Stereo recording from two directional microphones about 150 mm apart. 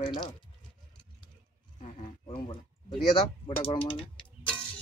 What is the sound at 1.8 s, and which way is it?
Speech, 35° left (ahead or behind).